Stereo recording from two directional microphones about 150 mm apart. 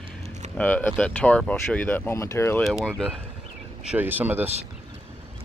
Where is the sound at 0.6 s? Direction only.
10° left (ahead or behind).